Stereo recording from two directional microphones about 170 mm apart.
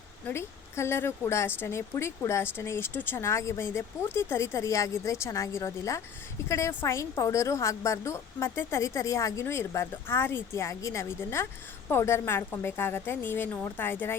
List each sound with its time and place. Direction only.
0.3 s a woman's voice: 15° left (ahead or behind)